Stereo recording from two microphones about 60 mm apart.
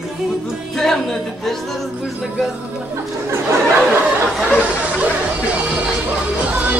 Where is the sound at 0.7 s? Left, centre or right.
Centre.